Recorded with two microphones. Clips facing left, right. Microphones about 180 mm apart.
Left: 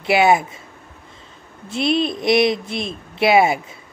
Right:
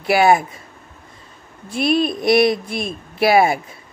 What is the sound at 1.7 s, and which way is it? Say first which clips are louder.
Speech: right 1 dB; 25° left (ahead or behind).